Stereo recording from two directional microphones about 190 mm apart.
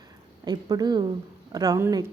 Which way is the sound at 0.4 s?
20° right (ahead or behind).